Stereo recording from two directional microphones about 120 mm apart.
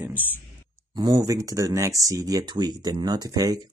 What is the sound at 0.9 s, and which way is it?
Speech, 35° right (ahead or behind).